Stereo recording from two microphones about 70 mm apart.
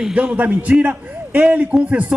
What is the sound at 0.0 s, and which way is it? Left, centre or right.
A man's voice, centre.